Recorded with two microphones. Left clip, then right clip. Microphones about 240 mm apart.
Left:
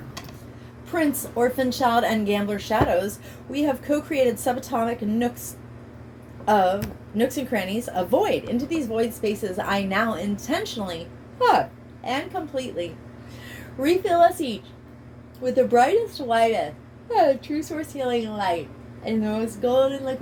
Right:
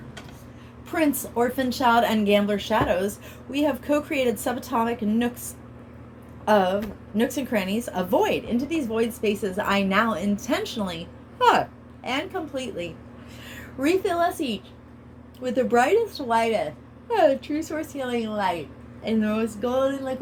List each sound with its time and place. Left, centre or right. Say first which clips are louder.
0.9 s a woman's voice: even; right
6.4 s a woman's voice: left 1 dB; right